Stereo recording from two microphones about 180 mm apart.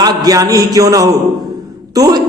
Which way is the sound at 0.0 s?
20° right (ahead or behind).